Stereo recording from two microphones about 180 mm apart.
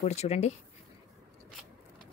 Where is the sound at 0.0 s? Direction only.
35° left (ahead or behind).